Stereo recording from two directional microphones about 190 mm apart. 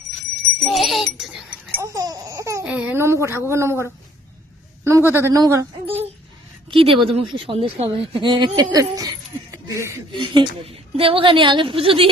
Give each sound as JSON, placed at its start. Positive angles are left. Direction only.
{"t": 0.6, "sound": "sheep", "side_deg": 0}
{"t": 1.8, "sound": "laughter", "side_deg": -15}
{"t": 2.6, "sound": "speech", "side_deg": -5}
{"t": 6.7, "sound": "speech", "side_deg": -25}